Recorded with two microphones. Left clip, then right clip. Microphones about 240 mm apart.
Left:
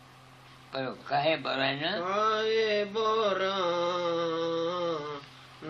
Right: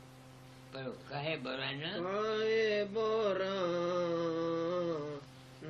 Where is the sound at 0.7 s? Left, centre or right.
Centre.